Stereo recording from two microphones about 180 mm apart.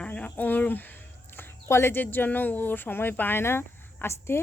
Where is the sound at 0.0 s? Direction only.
5° left (ahead or behind).